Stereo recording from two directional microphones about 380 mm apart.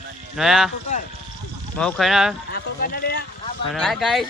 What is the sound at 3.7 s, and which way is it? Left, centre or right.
Speech, centre.